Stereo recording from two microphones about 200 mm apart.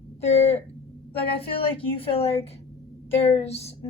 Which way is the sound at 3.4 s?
30° left (ahead or behind).